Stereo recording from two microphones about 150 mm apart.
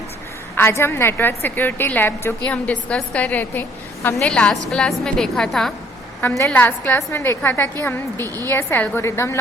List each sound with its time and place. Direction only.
0.5 s a woman's voice: 15° left (ahead or behind)
6.2 s a woman's voice: 20° left (ahead or behind)